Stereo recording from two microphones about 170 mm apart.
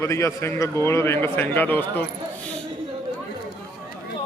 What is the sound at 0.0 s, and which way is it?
Speech, 15° left (ahead or behind).